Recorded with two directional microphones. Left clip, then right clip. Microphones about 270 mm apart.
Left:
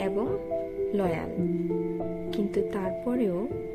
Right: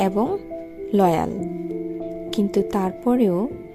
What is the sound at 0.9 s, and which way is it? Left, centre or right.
Speech, right.